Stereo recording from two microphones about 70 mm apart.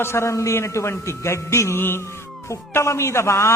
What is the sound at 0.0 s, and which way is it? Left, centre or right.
A man's voice, left.